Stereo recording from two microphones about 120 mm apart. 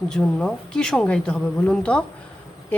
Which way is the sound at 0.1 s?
5° left (ahead or behind).